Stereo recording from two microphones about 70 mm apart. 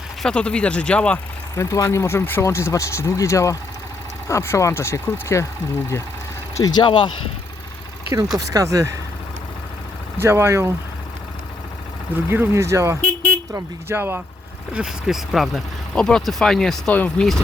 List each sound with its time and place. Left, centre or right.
0.2 s speech: centre
1.5 s speech: left
6.6 s speech: left
8.5 s speech: right
10.2 s speech: right
12.1 s speech: right
14.8 s speech: centre
15.9 s speech: centre